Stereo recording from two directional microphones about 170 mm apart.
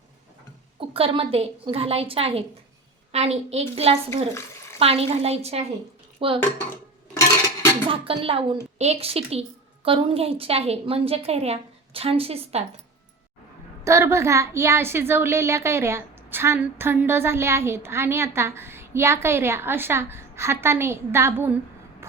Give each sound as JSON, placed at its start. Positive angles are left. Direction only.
{"t": 0.8, "sound": "a woman's voice", "side_deg": -35}
{"t": 7.9, "sound": "a woman's voice", "side_deg": -30}
{"t": 13.8, "sound": "a woman's voice", "side_deg": -15}